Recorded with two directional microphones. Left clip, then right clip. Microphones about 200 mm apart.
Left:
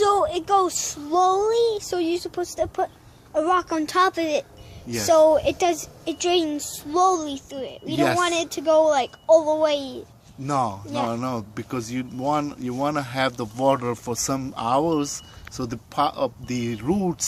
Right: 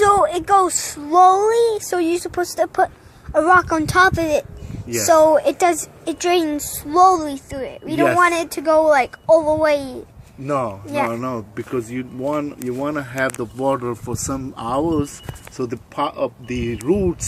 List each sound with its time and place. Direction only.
0.0 s speech: 10° right (ahead or behind)
10.4 s a man's voice: 40° left (ahead or behind)